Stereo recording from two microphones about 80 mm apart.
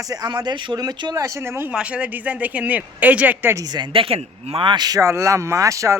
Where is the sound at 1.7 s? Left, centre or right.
Centre.